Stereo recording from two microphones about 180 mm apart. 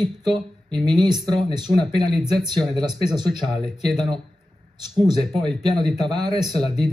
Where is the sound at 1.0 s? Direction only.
25° right (ahead or behind).